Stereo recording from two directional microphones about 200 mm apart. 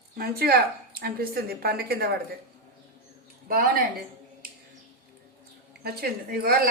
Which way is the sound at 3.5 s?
45° right (ahead or behind).